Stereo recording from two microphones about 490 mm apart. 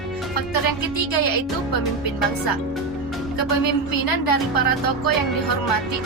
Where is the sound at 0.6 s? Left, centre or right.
Left.